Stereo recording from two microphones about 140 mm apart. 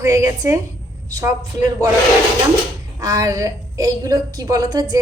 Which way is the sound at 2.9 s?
25° right (ahead or behind).